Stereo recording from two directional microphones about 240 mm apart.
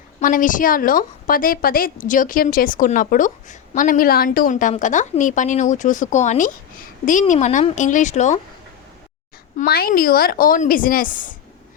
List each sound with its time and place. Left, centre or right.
0.2 s a woman's voice: left
9.6 s a woman's voice: left